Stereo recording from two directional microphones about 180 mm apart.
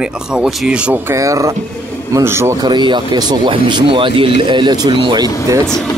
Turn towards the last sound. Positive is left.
turn(degrees=5)  # may be behind; listen again after turning